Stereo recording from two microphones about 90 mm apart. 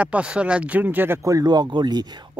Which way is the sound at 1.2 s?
35° right (ahead or behind).